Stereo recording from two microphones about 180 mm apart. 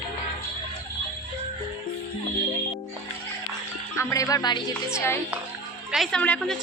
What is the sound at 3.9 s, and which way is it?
Speech, 15° left (ahead or behind).